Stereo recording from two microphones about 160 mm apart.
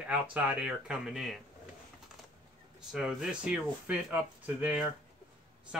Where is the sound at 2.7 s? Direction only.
5° right (ahead or behind).